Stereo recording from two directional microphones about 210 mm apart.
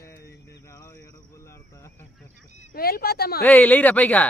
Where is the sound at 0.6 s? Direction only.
15° left (ahead or behind).